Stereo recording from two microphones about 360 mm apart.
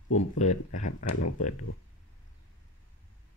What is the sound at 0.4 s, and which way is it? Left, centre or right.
Speech, centre.